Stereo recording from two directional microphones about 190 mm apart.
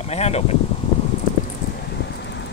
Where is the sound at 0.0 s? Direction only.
35° left (ahead or behind).